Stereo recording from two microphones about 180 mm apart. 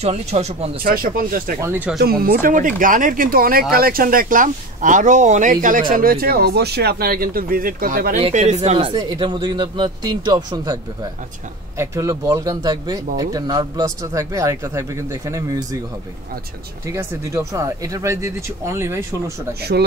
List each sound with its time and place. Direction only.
0.0 s speech: 35° right (ahead or behind)
0.8 s speech: 50° right (ahead or behind)
1.6 s speech: 10° right (ahead or behind)
2.2 s speech: 50° right (ahead or behind)
8.2 s speech: 40° right (ahead or behind); by 10.8 s 20° right (ahead or behind)
11.8 s speech: 15° right (ahead or behind)
16.8 s speech: 15° right (ahead or behind)